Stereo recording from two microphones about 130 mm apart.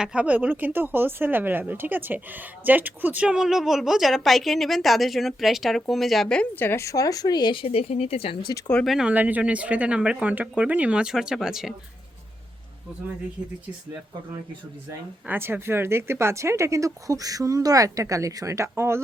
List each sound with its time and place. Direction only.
0.0 s speech: 10° right (ahead or behind); by 8.4 s 50° left (ahead or behind)
8.4 s speech: 30° left (ahead or behind)
8.7 s speech: centre (ahead or behind)
14.8 s speech: 20° right (ahead or behind)